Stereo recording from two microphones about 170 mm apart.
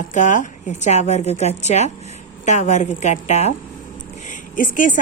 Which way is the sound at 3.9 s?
45° left (ahead or behind).